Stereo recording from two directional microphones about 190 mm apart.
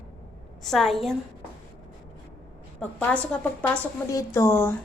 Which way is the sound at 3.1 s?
5° left (ahead or behind).